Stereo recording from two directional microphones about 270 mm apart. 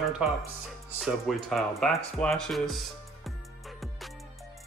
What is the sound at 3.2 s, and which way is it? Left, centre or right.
Music, centre.